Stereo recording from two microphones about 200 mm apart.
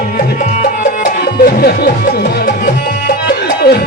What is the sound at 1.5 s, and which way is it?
Speech, 50° left (ahead or behind).